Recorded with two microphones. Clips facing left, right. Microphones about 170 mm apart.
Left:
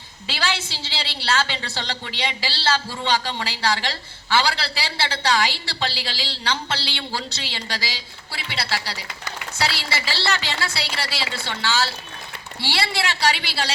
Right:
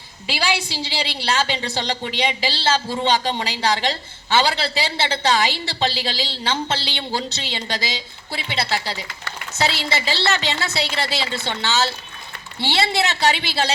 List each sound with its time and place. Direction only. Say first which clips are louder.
0.3 s a woman's voice: right 4 dB; 15° right (ahead or behind)